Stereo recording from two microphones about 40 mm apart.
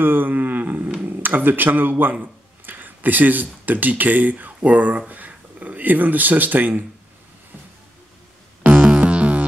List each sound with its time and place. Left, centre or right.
0.0 s a sound: right
1.0 s speech: right
8.6 s music: right